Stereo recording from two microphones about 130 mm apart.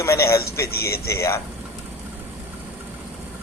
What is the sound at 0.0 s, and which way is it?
Speech, 20° left (ahead or behind).